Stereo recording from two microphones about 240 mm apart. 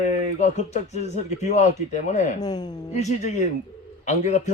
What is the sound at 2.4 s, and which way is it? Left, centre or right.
Speech, centre.